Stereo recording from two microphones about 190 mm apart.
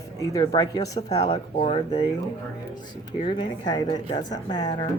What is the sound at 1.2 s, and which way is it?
Speech, 35° left (ahead or behind).